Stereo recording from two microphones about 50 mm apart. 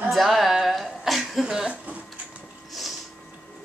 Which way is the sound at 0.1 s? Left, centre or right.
Centre.